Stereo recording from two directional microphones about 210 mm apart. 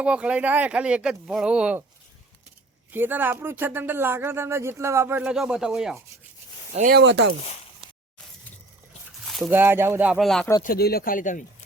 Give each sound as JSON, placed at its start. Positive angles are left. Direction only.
{"t": 0.0, "sound": "speech", "side_deg": -5}
{"t": 2.9, "sound": "speech", "side_deg": -10}
{"t": 6.7, "sound": "speech", "side_deg": -45}
{"t": 9.2, "sound": "speech", "side_deg": 0}
{"t": 10.6, "sound": "speech", "side_deg": 45}